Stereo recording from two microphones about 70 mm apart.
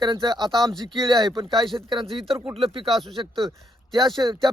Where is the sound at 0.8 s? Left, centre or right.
Right.